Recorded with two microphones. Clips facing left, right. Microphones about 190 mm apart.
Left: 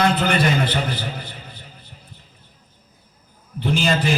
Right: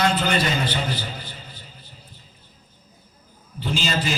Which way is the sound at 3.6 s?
60° left (ahead or behind).